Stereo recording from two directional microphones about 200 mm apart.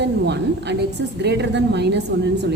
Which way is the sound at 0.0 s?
60° right (ahead or behind).